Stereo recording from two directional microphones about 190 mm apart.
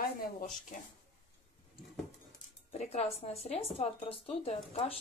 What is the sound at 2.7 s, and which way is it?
Speech, 35° left (ahead or behind).